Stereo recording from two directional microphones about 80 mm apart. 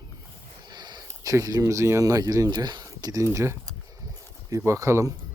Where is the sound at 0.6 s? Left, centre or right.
Right.